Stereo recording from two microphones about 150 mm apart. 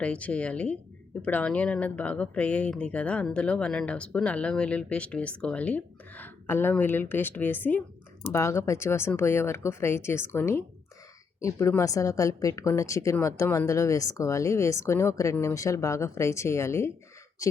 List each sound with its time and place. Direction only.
0.0 s a woman's voice: 10° left (ahead or behind)